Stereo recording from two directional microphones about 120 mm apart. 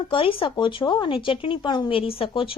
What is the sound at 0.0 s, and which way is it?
A woman's voice, 45° left (ahead or behind).